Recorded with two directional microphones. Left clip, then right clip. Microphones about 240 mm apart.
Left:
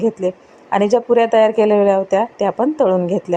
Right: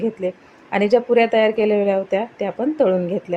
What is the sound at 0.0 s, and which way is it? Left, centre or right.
A woman's voice, centre.